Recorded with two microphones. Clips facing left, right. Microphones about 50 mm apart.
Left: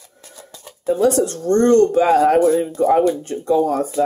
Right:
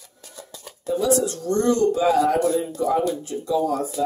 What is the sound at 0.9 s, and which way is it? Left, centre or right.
Speech, left.